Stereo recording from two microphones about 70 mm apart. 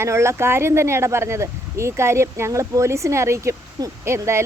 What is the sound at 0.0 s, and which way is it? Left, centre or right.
Speech, right.